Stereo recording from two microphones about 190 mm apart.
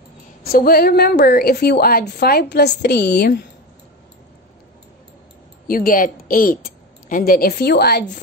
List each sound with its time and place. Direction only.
0.4 s a woman's voice: 50° left (ahead or behind)
5.7 s a woman's voice: 50° left (ahead or behind)